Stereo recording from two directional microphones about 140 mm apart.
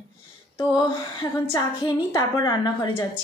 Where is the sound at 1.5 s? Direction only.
20° left (ahead or behind).